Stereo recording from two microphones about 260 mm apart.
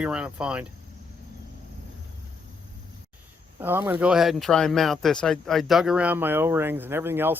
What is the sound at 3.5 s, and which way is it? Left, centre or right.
Speech, centre.